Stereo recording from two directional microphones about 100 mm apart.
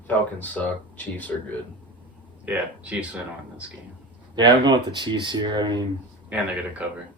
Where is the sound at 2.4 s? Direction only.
15° right (ahead or behind).